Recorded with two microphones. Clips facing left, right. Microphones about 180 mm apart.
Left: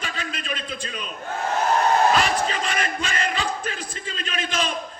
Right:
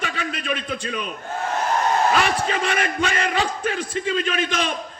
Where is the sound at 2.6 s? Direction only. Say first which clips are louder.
Right 4 dB; 60° right (ahead or behind).